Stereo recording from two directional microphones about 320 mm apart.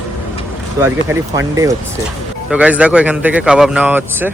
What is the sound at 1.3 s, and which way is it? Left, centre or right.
Speech, centre.